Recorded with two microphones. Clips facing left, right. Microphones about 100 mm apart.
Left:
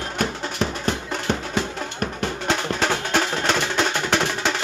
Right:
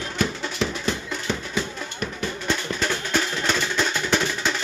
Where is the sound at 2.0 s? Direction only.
70° left (ahead or behind).